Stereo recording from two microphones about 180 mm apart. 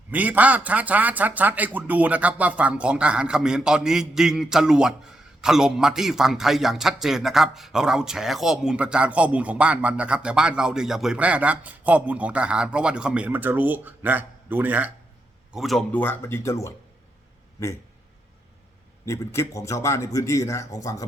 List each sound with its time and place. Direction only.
0.1 s a man's voice: 10° right (ahead or behind); by 16.7 s 15° left (ahead or behind)
19.0 s a man's voice: 15° left (ahead or behind)